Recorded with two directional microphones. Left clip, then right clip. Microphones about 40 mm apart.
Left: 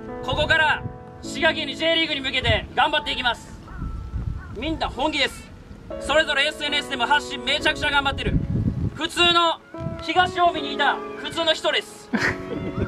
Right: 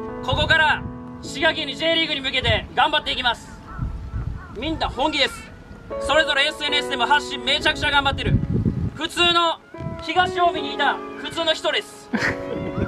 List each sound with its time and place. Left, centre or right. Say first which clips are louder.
0.2 s speech: right 2 dB; right
4.6 s speech: right 2 dB; right
12.2 s speech: right 1 dB; centre
12.4 s music: right 2 dB; right